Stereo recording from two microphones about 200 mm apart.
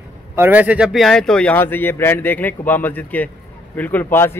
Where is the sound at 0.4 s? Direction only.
10° right (ahead or behind).